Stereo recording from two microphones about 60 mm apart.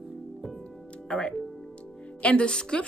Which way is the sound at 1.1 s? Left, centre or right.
Centre.